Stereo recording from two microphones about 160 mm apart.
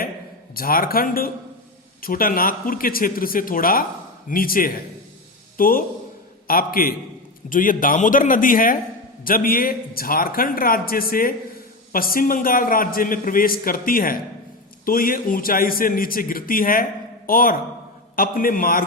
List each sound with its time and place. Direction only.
0.5 s a man's voice: 65° left (ahead or behind)